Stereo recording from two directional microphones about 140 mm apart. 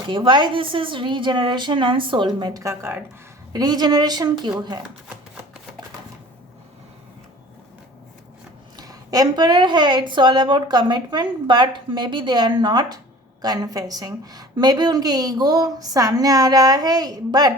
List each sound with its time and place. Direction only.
0.1 s a woman's voice: 35° right (ahead or behind)
8.7 s a woman's voice: 25° right (ahead or behind)